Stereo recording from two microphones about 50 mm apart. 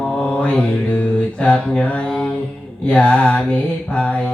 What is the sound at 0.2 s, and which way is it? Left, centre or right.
Mantra, left.